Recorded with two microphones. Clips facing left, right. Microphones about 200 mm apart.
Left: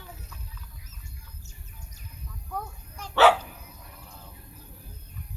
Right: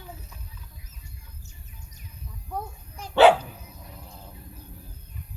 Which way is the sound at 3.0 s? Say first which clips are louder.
Right 4 dB; 15° right (ahead or behind).